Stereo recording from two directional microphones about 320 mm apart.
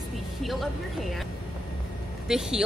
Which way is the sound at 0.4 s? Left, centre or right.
Centre.